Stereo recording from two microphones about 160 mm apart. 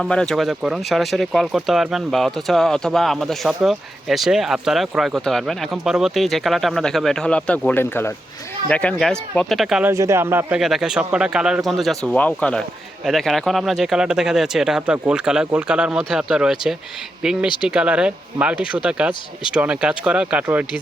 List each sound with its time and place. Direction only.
0.0 s speech: 5° left (ahead or behind)
9.9 s speech: 20° right (ahead or behind)
10.6 s speech: centre (ahead or behind)